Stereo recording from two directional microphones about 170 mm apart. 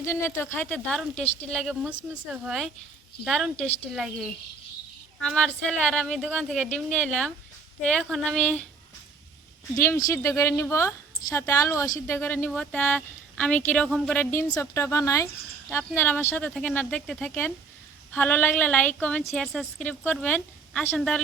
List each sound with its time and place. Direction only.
0.0 s a woman's voice: 15° left (ahead or behind)
2.3 s speech: 5° right (ahead or behind)
9.7 s a woman's voice: 15° left (ahead or behind)